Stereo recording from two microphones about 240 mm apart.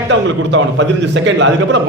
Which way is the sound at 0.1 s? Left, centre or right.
Right.